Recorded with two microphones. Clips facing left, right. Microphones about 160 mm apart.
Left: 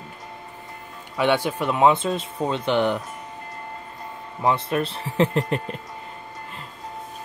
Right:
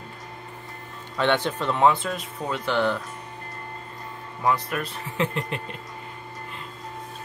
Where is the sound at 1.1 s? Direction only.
10° left (ahead or behind).